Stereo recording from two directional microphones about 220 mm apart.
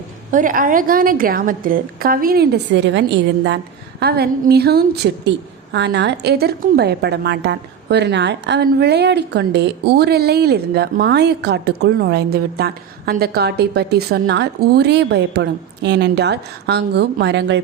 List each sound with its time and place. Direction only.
0.3 s a woman's voice: 35° right (ahead or behind); by 17.6 s 50° right (ahead or behind)